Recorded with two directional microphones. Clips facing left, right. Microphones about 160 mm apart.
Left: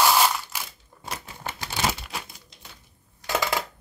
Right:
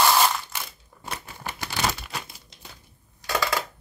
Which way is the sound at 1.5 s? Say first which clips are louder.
Even; 20° left (ahead or behind).